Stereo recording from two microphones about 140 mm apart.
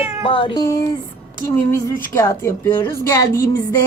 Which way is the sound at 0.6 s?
25° left (ahead or behind).